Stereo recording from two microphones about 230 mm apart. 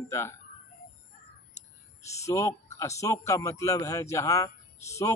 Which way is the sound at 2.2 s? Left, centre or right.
Centre.